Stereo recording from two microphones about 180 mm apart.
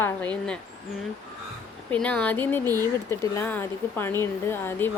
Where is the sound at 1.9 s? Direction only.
5° left (ahead or behind).